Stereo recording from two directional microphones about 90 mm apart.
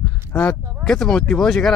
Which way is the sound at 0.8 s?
5° left (ahead or behind).